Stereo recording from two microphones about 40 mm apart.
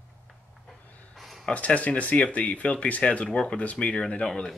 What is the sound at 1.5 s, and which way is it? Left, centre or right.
Speech, left.